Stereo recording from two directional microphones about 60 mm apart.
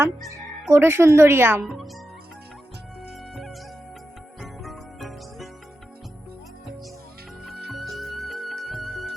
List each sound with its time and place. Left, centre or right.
0.7 s speech: right
1.6 s speech: centre
3.3 s music: centre
7.4 s music: centre